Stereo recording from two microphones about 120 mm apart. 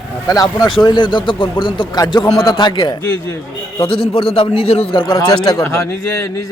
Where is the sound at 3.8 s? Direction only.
50° left (ahead or behind).